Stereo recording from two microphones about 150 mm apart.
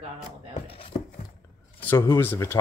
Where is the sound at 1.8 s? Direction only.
15° left (ahead or behind).